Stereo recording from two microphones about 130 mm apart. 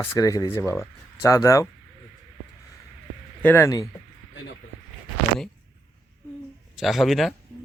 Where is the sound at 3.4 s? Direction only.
15° left (ahead or behind).